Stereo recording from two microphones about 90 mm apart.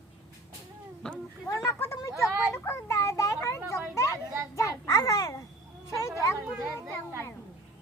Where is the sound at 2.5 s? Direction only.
30° left (ahead or behind).